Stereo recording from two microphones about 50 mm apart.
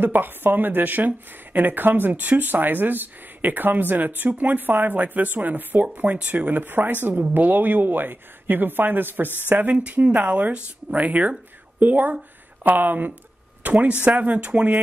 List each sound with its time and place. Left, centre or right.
0.0 s speech: right
9.7 s speech: right